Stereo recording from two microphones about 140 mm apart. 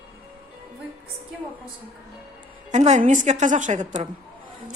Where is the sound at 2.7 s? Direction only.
55° right (ahead or behind).